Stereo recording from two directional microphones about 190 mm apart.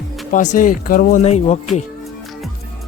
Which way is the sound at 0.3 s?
45° left (ahead or behind).